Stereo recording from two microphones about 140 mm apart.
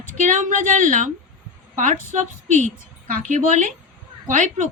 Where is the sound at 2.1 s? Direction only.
55° right (ahead or behind).